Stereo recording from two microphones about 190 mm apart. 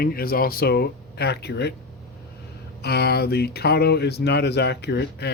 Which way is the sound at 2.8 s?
55° left (ahead or behind).